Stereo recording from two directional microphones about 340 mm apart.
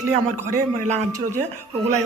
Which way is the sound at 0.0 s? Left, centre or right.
Centre.